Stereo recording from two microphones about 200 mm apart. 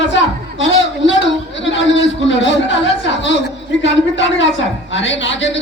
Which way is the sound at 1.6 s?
65° left (ahead or behind).